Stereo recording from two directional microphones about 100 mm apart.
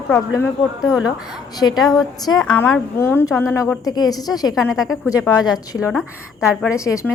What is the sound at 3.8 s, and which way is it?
Speech, 40° left (ahead or behind).